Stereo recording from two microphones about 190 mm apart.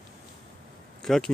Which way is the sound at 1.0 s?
Centre (ahead or behind).